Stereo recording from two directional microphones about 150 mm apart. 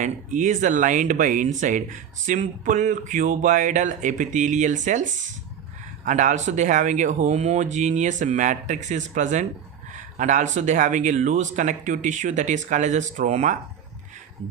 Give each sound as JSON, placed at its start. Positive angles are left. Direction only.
{"t": 0.0, "sound": "speech", "side_deg": -55}
{"t": 6.1, "sound": "speech", "side_deg": -55}